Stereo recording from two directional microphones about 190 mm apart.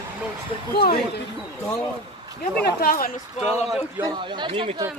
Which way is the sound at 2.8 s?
50° left (ahead or behind).